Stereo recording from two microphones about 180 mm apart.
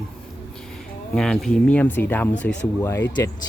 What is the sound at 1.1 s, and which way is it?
Speech, 5° left (ahead or behind).